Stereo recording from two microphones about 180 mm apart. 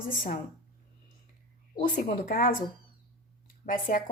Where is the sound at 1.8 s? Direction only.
50° left (ahead or behind).